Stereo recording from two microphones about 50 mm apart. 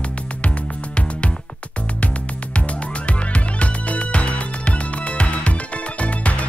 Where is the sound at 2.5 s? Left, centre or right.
Left.